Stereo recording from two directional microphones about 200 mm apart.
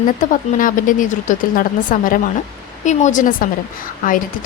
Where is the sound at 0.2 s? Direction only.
40° left (ahead or behind).